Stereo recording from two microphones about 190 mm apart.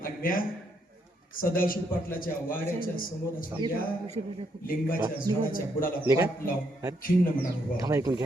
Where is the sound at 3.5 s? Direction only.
30° right (ahead or behind).